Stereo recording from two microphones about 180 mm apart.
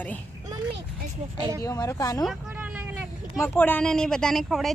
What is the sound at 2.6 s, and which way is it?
Vehicle, 10° right (ahead or behind).